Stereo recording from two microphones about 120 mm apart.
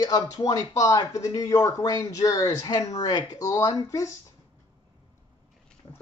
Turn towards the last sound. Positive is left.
turn(degrees=25)  # may be behind; listen again after turning